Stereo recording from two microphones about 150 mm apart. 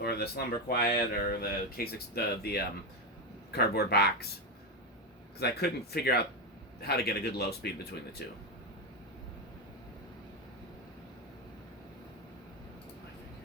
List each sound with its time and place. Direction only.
0.0 s speech: 90° left
5.4 s speech: 90° left